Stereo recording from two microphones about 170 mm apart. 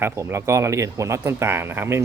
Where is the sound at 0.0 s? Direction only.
15° right (ahead or behind).